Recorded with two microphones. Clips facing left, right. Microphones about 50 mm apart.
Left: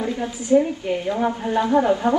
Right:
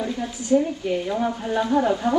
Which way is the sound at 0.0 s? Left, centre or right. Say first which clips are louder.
Left 2 dB; left.